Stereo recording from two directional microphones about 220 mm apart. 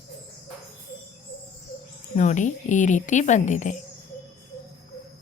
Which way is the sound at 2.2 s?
35° left (ahead or behind).